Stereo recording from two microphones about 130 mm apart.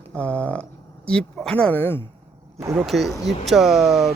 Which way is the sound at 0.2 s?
10° left (ahead or behind).